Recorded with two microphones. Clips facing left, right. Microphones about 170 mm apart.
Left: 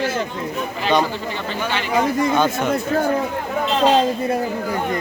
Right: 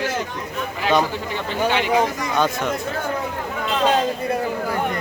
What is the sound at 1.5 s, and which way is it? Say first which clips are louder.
Speech: right 5 dB; 15° right (ahead or behind).